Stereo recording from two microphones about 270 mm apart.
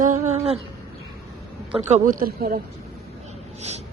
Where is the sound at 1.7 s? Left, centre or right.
Right.